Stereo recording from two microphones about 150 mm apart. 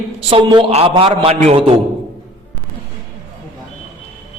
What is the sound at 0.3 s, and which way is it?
A man's voice, 40° right (ahead or behind).